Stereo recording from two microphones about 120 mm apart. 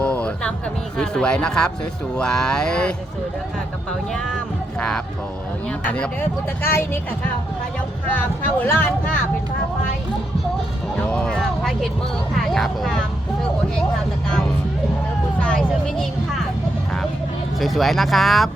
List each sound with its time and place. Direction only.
0.0 s music: 10° left (ahead or behind)
0.9 s speech: 5° left (ahead or behind)
4.8 s speech: 5° left (ahead or behind)
8.1 s speech: 15° left (ahead or behind)
11.0 s speech: 10° left (ahead or behind)
14.3 s speech: 5° left (ahead or behind)
17.6 s speech: centre (ahead or behind)